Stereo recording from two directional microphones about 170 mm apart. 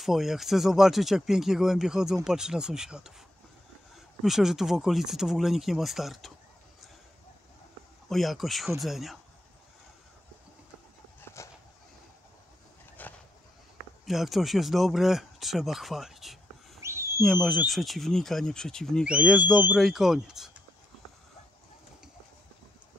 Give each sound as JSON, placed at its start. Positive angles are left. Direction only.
{"t": 0.0, "sound": "speech", "side_deg": 0}
{"t": 8.1, "sound": "speech", "side_deg": 0}
{"t": 13.0, "sound": "a sound", "side_deg": 10}
{"t": 14.0, "sound": "speech", "side_deg": 0}
{"t": 16.8, "sound": "a sound", "side_deg": -15}
{"t": 17.2, "sound": "speech", "side_deg": 5}